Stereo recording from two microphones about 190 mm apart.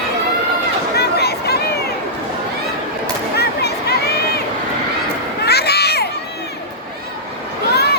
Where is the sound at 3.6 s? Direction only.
60° left (ahead or behind).